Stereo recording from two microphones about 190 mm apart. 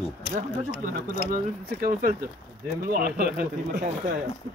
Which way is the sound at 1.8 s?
45° right (ahead or behind).